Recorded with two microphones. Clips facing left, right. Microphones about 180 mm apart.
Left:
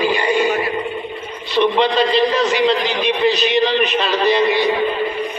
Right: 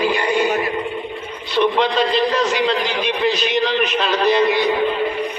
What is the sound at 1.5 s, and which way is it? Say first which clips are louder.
A man's voice: left 2 dB; centre (ahead or behind).